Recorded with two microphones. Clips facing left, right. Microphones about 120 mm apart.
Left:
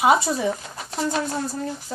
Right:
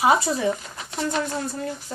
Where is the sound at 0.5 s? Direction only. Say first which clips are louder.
Left 2 dB; 40° left (ahead or behind).